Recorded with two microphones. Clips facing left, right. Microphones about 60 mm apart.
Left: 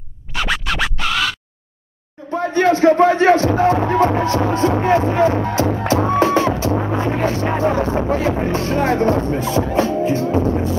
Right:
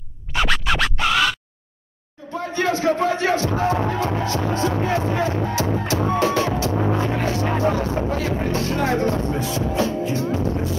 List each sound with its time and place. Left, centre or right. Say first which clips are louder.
0.3 s music: even; centre
2.3 s speech: left 7 dB; left
5.9 s music: left 6 dB; left
7.0 s a sound: left 3 dB; left
7.4 s music: left 3 dB; left